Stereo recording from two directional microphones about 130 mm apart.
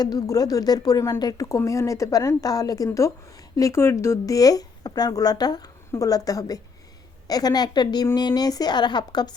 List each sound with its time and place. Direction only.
0.0 s speech: 30° left (ahead or behind)